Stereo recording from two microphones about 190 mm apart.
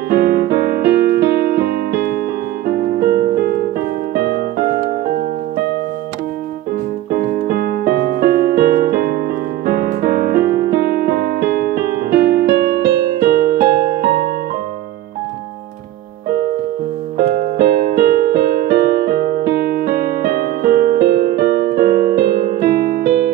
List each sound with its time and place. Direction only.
0.1 s music: 55° right (ahead or behind)
7.1 s music: 55° right (ahead or behind)
17.2 s keyboard: 50° right (ahead or behind)